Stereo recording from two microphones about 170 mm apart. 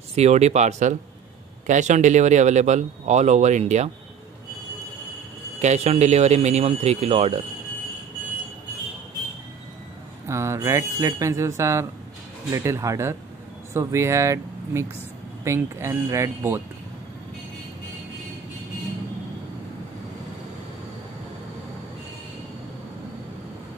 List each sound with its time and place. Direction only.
0.1 s speech: 40° right (ahead or behind)
5.6 s speech: 40° right (ahead or behind)
10.2 s speech: 15° right (ahead or behind)